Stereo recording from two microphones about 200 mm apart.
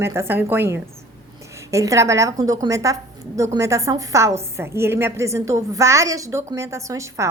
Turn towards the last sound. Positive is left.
turn(degrees=-15)  # may be behind; listen again after turning